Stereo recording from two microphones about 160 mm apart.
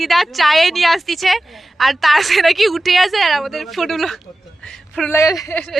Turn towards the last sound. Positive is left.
turn(degrees=20)  # may be behind; listen again after turning